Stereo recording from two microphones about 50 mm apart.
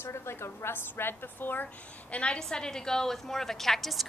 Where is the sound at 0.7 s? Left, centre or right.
Left.